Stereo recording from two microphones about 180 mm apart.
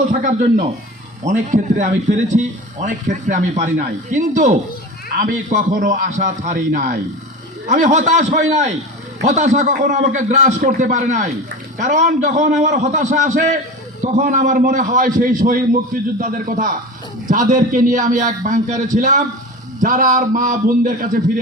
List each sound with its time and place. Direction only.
0.1 s a man's voice: 45° right (ahead or behind)